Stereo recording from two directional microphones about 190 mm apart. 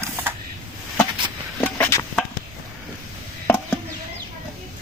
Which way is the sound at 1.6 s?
10° left (ahead or behind).